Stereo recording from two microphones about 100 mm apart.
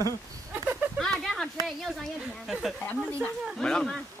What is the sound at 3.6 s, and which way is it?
Speech, 5° left (ahead or behind).